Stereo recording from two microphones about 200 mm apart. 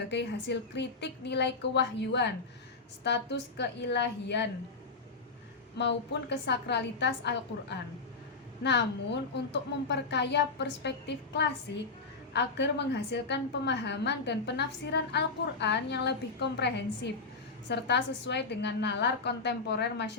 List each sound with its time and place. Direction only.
0.1 s a woman's voice: 60° left (ahead or behind)
5.7 s a woman's voice: 60° left (ahead or behind)